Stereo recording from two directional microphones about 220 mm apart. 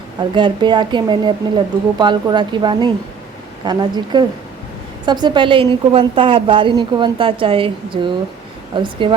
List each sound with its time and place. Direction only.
0.2 s a woman's voice: 20° right (ahead or behind)